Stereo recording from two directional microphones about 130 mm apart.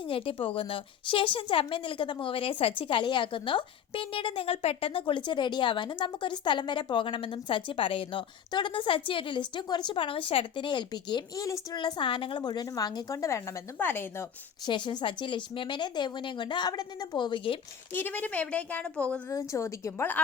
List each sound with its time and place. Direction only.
0.1 s a woman's voice: 45° left (ahead or behind); by 14.3 s 15° left (ahead or behind)
14.7 s a woman's voice: 40° left (ahead or behind)
17.9 s speech: 15° left (ahead or behind)
19.3 s a woman's voice: 25° left (ahead or behind)